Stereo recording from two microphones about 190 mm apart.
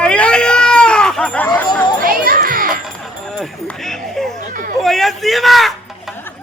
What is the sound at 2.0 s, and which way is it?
Children playing, 50° right (ahead or behind).